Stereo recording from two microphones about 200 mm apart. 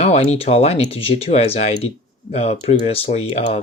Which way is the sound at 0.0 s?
30° left (ahead or behind).